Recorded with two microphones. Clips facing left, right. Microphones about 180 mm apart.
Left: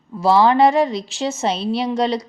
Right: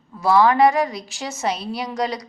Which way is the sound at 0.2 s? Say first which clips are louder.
Left 2 dB; 25° left (ahead or behind).